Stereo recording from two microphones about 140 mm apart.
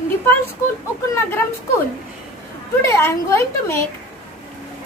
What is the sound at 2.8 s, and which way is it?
A woman's voice, 20° left (ahead or behind).